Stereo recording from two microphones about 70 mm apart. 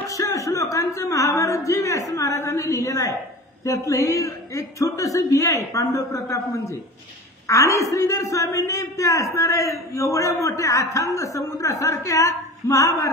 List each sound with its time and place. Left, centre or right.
0.1 s a man's voice: left
7.4 s a man's voice: left